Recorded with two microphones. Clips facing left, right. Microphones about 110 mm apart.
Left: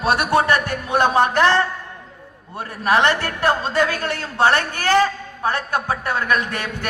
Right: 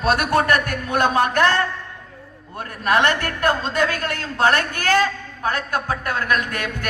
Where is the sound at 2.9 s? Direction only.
25° left (ahead or behind).